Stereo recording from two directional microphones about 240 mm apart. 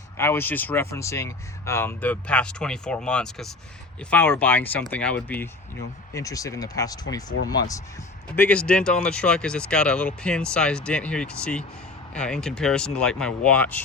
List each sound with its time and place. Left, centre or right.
0.2 s speech: centre
8.4 s speech: centre